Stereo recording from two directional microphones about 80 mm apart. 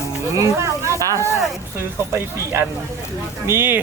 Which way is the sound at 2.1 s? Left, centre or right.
Right.